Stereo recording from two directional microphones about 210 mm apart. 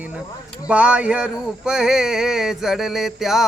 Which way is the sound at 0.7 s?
5° right (ahead or behind).